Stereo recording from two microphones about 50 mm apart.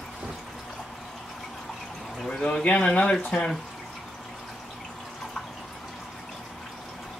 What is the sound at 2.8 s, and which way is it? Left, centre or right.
Speech, centre.